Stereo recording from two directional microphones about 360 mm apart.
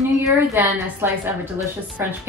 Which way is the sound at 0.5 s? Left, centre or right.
Centre.